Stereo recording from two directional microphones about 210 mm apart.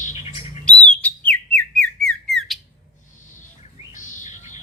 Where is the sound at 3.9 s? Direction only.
35° left (ahead or behind).